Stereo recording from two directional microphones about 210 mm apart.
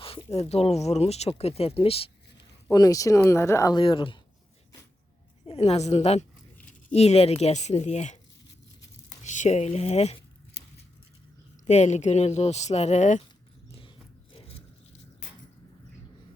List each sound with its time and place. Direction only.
0.0 s speech: 25° left (ahead or behind)
2.6 s speech: 15° left (ahead or behind)
5.5 s speech: 30° left (ahead or behind)
9.2 s speech: 35° left (ahead or behind)
11.6 s speech: 35° left (ahead or behind)
13.7 s dog: 25° left (ahead or behind)